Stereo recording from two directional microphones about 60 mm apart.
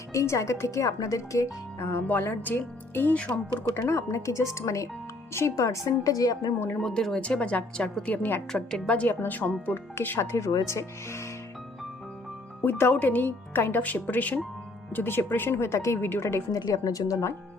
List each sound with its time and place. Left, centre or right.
0.1 s speech: left
0.8 s a woman's voice: left
1.8 s speech: left
2.0 s speech: left
3.8 s speech: left
5.3 s a woman's voice: left
6.7 s a woman's voice: centre
7.2 s a woman's voice: centre
9.0 s speech: left
10.2 s speech: left
12.6 s speech: left
16.5 s a woman's voice: left